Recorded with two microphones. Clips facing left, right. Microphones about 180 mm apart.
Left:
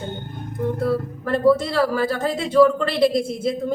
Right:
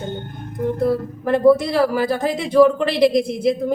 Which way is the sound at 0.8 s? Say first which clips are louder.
Right 3 dB; 15° right (ahead or behind).